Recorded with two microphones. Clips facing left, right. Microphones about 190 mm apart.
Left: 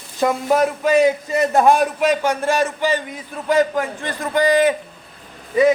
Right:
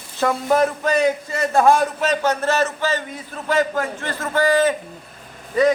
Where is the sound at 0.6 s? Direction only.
5° left (ahead or behind).